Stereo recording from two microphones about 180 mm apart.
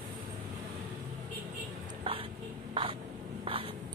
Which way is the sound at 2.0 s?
30° right (ahead or behind).